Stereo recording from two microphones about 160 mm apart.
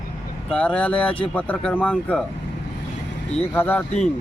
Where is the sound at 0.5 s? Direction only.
10° left (ahead or behind).